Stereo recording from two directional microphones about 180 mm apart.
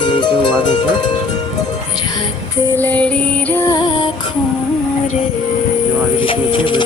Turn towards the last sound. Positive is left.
turn(degrees=30)  # may be behind; listen again after turning